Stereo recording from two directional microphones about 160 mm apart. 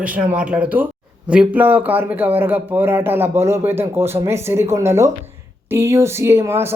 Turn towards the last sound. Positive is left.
turn(degrees=-15)  # may be behind; listen again after turning